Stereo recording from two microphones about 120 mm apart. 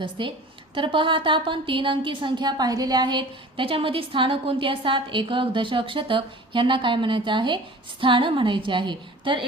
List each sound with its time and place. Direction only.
0.0 s a woman's voice: 40° right (ahead or behind)